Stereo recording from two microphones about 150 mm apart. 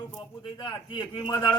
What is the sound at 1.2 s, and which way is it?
Speech, 30° left (ahead or behind).